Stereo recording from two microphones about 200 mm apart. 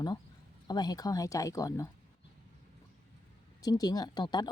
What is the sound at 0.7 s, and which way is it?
Speech, 20° left (ahead or behind).